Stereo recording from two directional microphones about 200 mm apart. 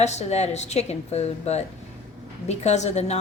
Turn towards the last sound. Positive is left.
turn(degrees=35)  # may be behind; listen again after turning